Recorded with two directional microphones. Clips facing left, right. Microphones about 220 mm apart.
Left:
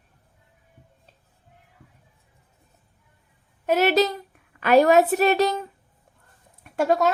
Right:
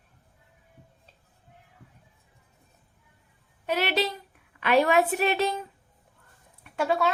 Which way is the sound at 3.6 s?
45° left (ahead or behind).